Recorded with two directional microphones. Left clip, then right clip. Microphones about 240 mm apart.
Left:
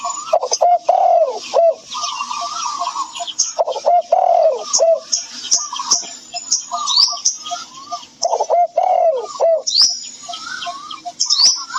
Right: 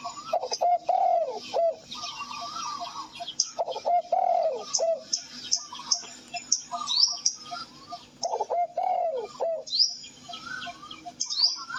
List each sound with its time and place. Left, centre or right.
0.0 s bird: left
1.5 s a sound: left
4.6 s music: left
6.5 s bird: left
8.3 s bird: left
11.2 s bird: left